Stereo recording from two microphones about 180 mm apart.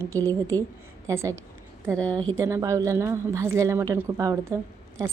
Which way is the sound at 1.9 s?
5° left (ahead or behind).